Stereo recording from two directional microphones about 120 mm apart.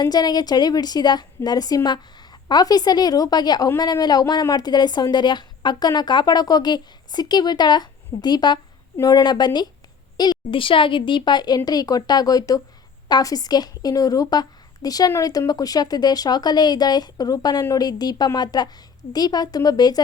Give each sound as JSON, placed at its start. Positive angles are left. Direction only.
{"t": 0.0, "sound": "a woman's voice", "side_deg": 35}